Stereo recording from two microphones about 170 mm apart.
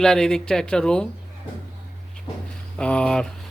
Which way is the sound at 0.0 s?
5° left (ahead or behind).